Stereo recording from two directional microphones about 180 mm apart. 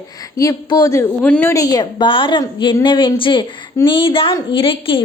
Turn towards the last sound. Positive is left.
turn(degrees=30)  # may be behind; listen again after turning